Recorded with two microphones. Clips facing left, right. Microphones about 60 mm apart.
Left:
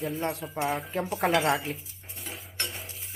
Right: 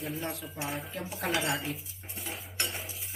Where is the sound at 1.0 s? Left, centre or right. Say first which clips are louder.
Left 7 dB; left.